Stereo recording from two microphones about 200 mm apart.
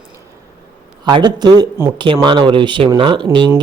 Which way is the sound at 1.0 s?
20° right (ahead or behind).